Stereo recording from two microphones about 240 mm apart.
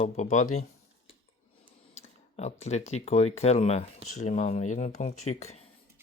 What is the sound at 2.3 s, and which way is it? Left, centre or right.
Speech, left.